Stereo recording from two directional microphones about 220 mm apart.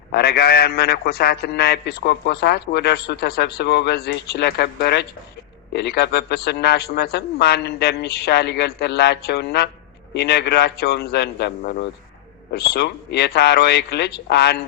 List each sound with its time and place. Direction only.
0.1 s a man's voice: 45° left (ahead or behind)